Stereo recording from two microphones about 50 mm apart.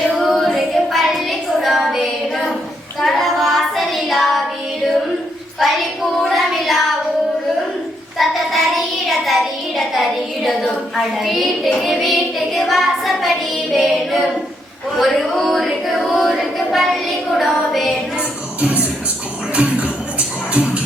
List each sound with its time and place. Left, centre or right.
0.2 s child singing: centre
6.2 s child singing: centre
8.2 s child singing: centre
12.5 s a sound: centre
13.7 s female singing: centre
14.9 s a capella: centre
18.2 s music: right